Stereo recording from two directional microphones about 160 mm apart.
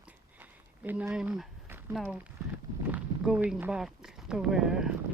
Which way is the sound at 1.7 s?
15° right (ahead or behind).